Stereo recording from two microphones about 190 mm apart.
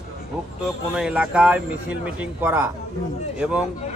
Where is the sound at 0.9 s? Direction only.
5° right (ahead or behind).